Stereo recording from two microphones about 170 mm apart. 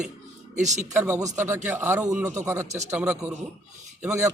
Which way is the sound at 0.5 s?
45° right (ahead or behind).